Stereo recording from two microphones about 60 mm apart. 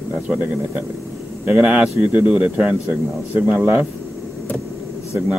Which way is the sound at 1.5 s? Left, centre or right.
Centre.